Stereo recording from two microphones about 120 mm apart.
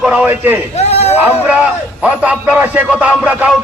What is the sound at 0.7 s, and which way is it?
Speech, 60° left (ahead or behind).